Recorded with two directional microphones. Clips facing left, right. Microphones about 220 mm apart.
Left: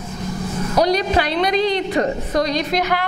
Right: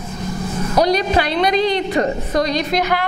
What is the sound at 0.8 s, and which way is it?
A woman's voice, 10° right (ahead or behind).